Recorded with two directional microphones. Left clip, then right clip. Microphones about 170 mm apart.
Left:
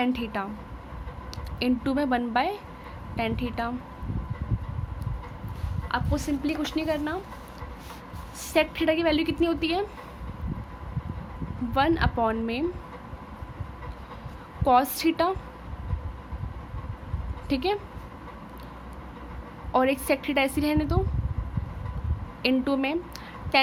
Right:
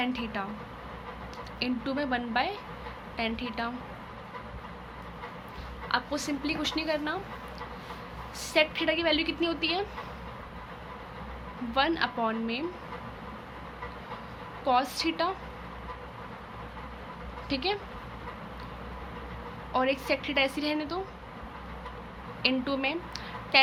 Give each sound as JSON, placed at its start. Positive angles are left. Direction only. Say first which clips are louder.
{"t": 0.0, "sound": "a woman's voice", "louder": "left 4 dB", "side_deg": 45}
{"t": 1.5, "sound": "a woman's voice", "louder": "left 5 dB", "side_deg": 50}
{"t": 5.9, "sound": "speech", "louder": "left 2 dB", "side_deg": 35}
{"t": 8.4, "sound": "a woman's voice", "louder": "left 2 dB", "side_deg": 40}
{"t": 11.7, "sound": "a woman's voice", "louder": "left 3 dB", "side_deg": 40}
{"t": 14.6, "sound": "a woman's voice", "louder": "left 5 dB", "side_deg": 50}
{"t": 17.5, "sound": "a woman's voice", "louder": "left 4 dB", "side_deg": 45}
{"t": 19.7, "sound": "a woman's voice", "louder": "left 4 dB", "side_deg": 50}
{"t": 22.4, "sound": "a woman's voice", "louder": "left 3 dB", "side_deg": 45}